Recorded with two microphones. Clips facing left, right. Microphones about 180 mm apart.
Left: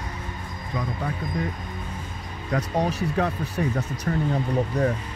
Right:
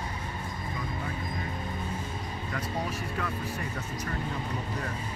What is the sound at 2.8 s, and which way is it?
Speech, 75° left (ahead or behind).